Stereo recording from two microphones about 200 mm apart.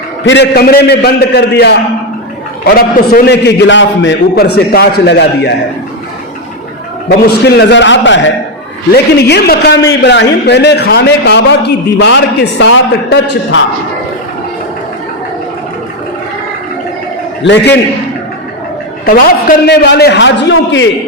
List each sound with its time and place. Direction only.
0.3 s a man's voice: 55° left (ahead or behind)
7.1 s a man's voice: 55° left (ahead or behind)
8.9 s a man's voice: 55° left (ahead or behind)
17.4 s a man's voice: 60° left (ahead or behind)
19.0 s a man's voice: 45° left (ahead or behind); by 20.8 s 65° left (ahead or behind)